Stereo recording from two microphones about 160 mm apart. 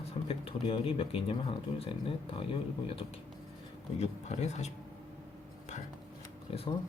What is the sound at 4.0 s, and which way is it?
Speech, 45° left (ahead or behind).